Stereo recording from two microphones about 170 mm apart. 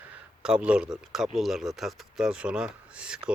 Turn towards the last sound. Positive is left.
turn(degrees=-5)  # may be behind; listen again after turning